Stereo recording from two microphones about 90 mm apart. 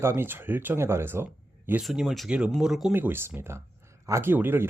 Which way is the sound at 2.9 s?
20° right (ahead or behind).